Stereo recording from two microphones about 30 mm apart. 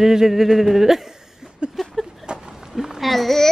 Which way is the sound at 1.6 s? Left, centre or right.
Right.